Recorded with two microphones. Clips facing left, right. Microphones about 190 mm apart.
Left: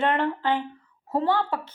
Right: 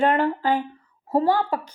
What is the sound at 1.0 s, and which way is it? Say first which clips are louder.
Speech: right 4 dB; 10° right (ahead or behind).